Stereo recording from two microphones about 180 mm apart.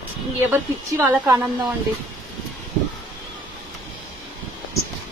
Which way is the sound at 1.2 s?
20° right (ahead or behind).